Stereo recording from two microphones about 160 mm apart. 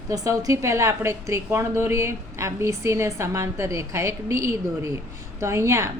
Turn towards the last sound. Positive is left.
turn(degrees=-15)  # may be behind; listen again after turning